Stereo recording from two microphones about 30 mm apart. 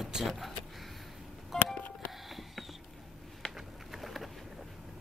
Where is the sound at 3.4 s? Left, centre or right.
Left.